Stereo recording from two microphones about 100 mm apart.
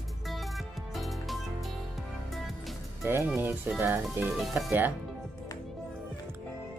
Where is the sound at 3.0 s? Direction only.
20° right (ahead or behind).